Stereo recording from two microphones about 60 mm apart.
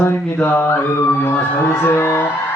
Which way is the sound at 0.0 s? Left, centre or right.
Left.